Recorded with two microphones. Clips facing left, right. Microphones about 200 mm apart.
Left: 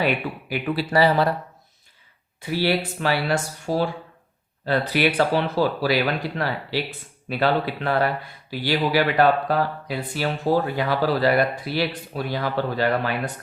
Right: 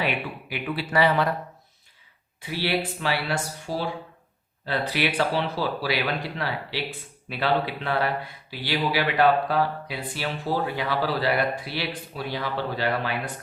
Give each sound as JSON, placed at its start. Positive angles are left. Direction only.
{"t": 0.0, "sound": "speech", "side_deg": 45}
{"t": 2.6, "sound": "speech", "side_deg": 45}